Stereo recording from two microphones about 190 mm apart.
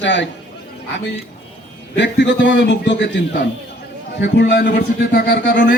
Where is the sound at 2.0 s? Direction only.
65° left (ahead or behind).